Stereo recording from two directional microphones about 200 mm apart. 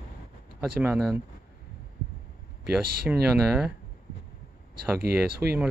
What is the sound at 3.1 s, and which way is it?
Speech, 5° right (ahead or behind).